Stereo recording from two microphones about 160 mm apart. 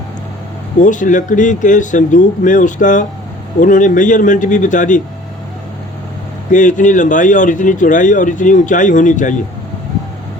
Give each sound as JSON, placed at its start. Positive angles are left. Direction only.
{"t": 0.8, "sound": "speech", "side_deg": 50}
{"t": 6.5, "sound": "speech", "side_deg": 50}